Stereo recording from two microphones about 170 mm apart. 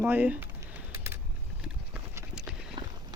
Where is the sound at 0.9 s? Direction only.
15° right (ahead or behind).